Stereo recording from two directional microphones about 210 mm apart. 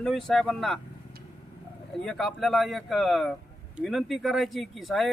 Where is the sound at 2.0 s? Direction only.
Centre (ahead or behind).